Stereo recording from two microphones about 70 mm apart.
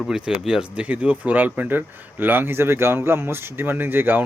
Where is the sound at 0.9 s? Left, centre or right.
Right.